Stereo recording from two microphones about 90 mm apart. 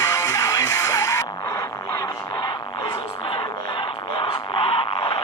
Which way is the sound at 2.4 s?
65° left (ahead or behind).